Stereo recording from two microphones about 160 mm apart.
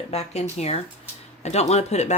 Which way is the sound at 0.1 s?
40° left (ahead or behind).